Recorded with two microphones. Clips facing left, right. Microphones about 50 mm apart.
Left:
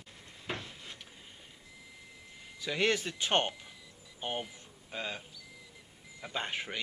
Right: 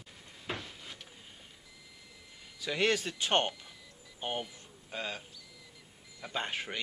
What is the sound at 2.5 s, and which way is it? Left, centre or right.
Speech, centre.